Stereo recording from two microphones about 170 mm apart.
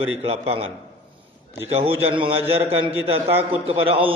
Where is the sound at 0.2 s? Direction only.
35° right (ahead or behind).